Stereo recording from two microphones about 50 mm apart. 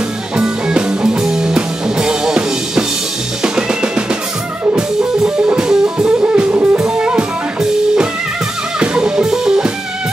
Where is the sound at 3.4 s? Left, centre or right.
Centre.